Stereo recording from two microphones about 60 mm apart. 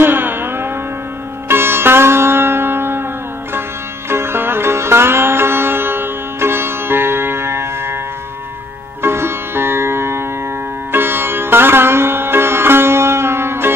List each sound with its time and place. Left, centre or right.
0.0 s music: right
1.5 s sitar: right
4.1 s music: right
9.0 s music: right